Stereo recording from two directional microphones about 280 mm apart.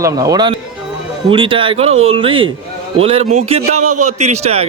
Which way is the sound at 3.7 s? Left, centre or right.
Right.